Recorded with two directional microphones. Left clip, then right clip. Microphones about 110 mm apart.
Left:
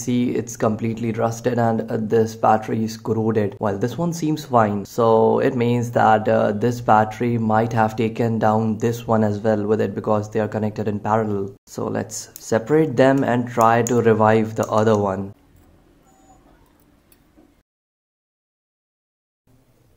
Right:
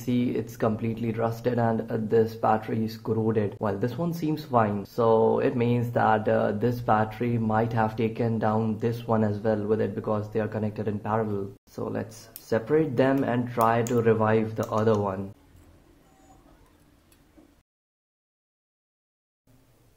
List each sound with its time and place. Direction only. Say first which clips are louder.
0.0 s speech: left 6 dB; 25° left (ahead or behind); by 15.2 s 40° left (ahead or behind)